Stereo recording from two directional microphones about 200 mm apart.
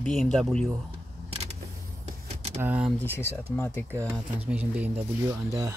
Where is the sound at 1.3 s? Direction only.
30° right (ahead or behind).